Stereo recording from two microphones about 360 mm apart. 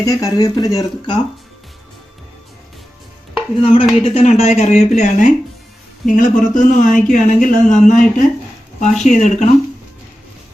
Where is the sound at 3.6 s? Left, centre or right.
Centre.